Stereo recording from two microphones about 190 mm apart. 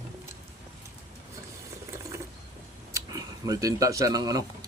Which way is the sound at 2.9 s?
20° right (ahead or behind).